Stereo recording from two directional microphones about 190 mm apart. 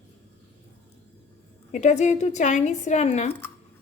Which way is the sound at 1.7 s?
40° left (ahead or behind).